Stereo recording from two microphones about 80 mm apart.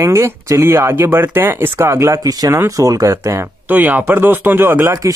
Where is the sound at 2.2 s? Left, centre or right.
Right.